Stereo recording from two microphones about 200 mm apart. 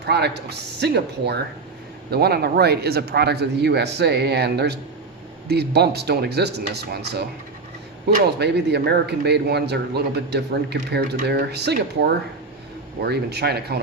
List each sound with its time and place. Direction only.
0.0 s speech: 55° right (ahead or behind)